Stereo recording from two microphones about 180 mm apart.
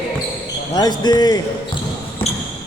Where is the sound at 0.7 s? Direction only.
20° left (ahead or behind).